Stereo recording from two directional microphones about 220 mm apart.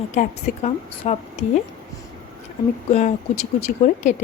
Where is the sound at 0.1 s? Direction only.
30° left (ahead or behind).